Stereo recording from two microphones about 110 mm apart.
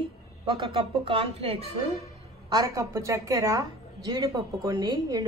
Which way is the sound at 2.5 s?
35° right (ahead or behind).